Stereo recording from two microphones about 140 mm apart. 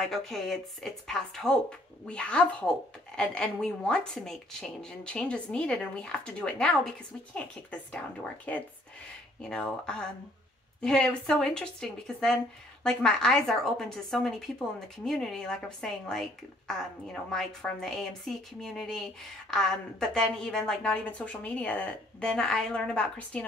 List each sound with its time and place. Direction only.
0.0 s a woman's voice: centre (ahead or behind)